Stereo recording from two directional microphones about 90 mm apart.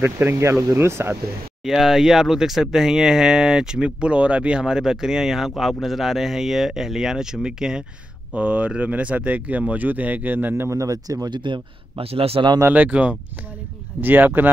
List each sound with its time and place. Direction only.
0.0 s speech: 25° right (ahead or behind)
1.6 s speech: 5° right (ahead or behind); by 10.7 s 20° right (ahead or behind)
10.7 s speech: 40° right (ahead or behind); by 12.4 s 90° right
12.7 s speech: 15° right (ahead or behind)